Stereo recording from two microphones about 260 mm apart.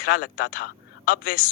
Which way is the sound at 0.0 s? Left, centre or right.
Left.